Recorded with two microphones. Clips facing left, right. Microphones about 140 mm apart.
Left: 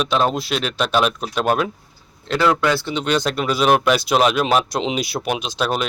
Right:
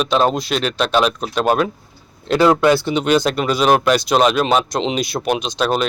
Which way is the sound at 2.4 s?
30° right (ahead or behind).